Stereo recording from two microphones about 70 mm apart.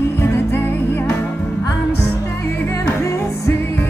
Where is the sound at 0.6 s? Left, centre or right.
Left.